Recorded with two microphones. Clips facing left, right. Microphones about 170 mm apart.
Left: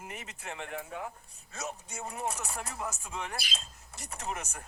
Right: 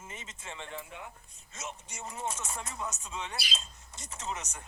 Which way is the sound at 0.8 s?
35° left (ahead or behind).